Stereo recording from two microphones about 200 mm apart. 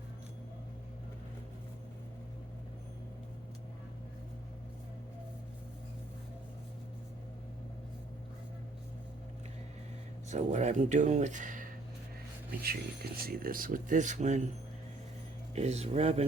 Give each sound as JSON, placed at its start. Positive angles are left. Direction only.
{"t": 10.2, "sound": "speech", "side_deg": -35}
{"t": 15.5, "sound": "speech", "side_deg": -30}